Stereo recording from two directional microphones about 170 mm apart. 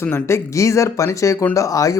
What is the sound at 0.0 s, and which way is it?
Speech, 15° left (ahead or behind).